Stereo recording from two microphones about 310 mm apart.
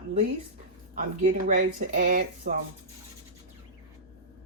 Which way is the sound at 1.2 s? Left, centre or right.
Right.